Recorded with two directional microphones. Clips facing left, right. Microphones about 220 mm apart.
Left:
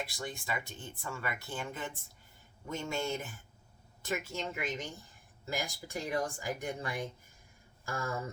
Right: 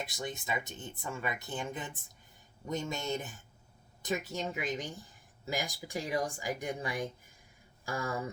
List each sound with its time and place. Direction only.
0.0 s speech: 20° right (ahead or behind)